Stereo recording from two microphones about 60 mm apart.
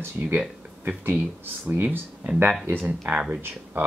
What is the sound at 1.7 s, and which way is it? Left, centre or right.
Speech, right.